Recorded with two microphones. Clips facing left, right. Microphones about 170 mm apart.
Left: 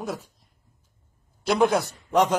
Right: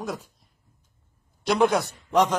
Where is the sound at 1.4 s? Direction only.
Centre (ahead or behind).